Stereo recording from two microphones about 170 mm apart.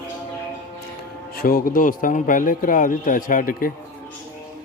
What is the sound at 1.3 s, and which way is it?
Speech, 60° left (ahead or behind).